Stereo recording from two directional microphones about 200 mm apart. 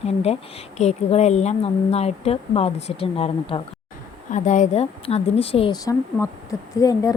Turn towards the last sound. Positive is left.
turn(degrees=15)  # may be behind; listen again after turning